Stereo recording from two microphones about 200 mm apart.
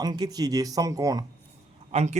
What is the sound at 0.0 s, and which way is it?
Speech, 20° right (ahead or behind).